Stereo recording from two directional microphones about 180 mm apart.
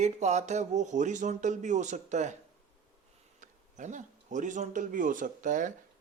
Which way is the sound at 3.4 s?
45° right (ahead or behind).